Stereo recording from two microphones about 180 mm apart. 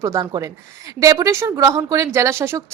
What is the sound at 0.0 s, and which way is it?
A woman's voice, 20° right (ahead or behind).